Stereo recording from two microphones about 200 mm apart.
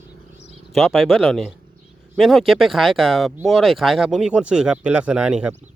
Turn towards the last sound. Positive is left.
turn(degrees=-5)  # may be behind; listen again after turning